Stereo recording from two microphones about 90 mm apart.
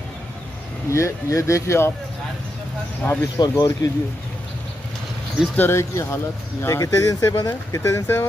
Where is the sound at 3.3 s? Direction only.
45° left (ahead or behind).